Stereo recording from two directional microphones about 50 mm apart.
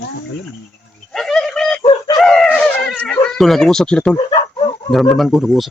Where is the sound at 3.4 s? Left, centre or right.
Centre.